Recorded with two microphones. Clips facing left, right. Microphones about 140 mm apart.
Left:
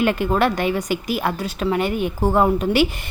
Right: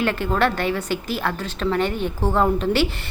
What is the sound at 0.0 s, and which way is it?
A woman's voice, 15° left (ahead or behind).